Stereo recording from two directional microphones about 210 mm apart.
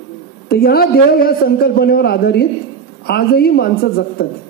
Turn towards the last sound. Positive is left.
turn(degrees=45)  # may be behind; listen again after turning